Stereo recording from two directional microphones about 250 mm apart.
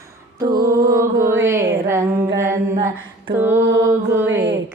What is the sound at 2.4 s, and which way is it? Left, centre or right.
Music, centre.